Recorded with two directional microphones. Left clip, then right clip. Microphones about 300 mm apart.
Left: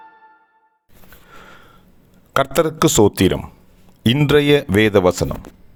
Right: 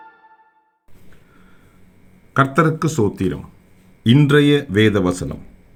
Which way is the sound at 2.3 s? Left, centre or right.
Left.